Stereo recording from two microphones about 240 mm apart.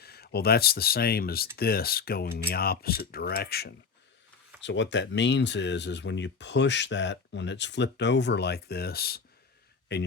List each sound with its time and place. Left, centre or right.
0.0 s speech: left